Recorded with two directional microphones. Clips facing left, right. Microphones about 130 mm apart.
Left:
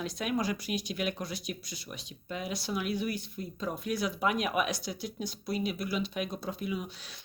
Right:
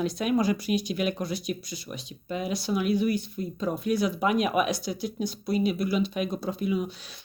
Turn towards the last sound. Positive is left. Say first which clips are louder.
# right 7 dB
turn(degrees=-25)  # may be behind; listen again after turning